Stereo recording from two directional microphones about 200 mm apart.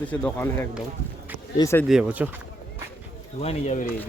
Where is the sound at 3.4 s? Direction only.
30° left (ahead or behind).